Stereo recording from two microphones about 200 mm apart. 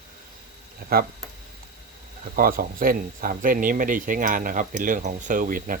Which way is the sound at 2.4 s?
45° right (ahead or behind).